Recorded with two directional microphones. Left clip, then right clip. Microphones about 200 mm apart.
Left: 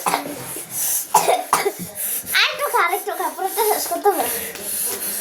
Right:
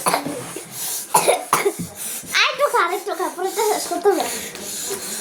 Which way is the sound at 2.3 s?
20° right (ahead or behind).